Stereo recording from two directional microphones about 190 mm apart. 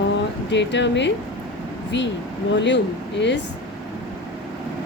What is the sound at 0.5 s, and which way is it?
Speech, 70° left (ahead or behind).